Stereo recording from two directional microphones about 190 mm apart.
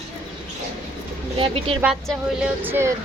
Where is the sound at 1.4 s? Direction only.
30° right (ahead or behind).